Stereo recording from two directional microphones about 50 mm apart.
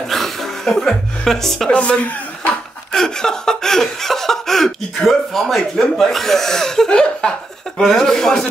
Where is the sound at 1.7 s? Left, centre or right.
Left.